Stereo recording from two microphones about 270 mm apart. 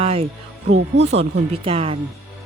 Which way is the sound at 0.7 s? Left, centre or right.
Right.